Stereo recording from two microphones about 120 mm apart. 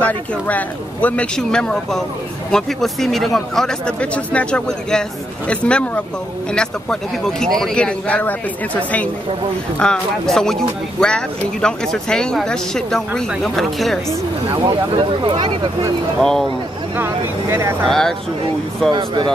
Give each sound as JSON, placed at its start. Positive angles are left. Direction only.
{"t": 0.0, "sound": "a man's voice", "side_deg": 15}
{"t": 9.8, "sound": "speech", "side_deg": 5}
{"t": 14.7, "sound": "speech", "side_deg": -45}
{"t": 16.2, "sound": "speech", "side_deg": 5}
{"t": 16.9, "sound": "speech", "side_deg": -20}
{"t": 17.8, "sound": "speech", "side_deg": 5}
{"t": 18.9, "sound": "speech", "side_deg": -40}